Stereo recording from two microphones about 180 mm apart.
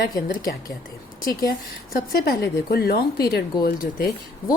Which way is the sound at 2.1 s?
60° left (ahead or behind).